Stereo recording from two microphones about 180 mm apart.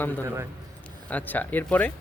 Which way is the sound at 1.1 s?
10° left (ahead or behind).